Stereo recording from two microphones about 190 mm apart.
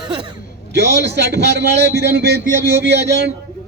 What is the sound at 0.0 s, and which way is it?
Speech, 25° right (ahead or behind).